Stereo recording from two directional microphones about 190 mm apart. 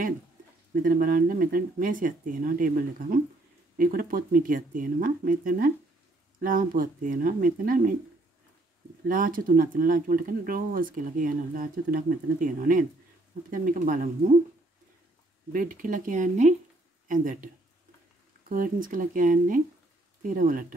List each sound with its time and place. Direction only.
0.8 s speech: 50° right (ahead or behind)
9.0 s speech: 45° right (ahead or behind)
15.5 s speech: 45° right (ahead or behind)
18.5 s speech: 45° right (ahead or behind)